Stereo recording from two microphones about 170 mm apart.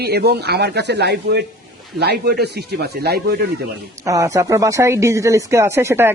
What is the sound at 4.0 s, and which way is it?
Speech, 20° right (ahead or behind).